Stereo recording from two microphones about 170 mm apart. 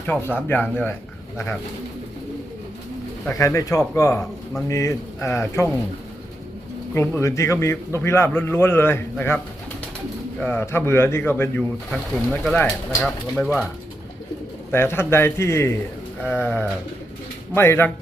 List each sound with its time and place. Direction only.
0.1 s a man's voice: 10° left (ahead or behind)
3.2 s a man's voice: 20° left (ahead or behind)
6.9 s a man's voice: 15° left (ahead or behind)
10.4 s a man's voice: 10° left (ahead or behind)
11.9 s speech: centre (ahead or behind)
14.7 s a man's voice: 15° left (ahead or behind)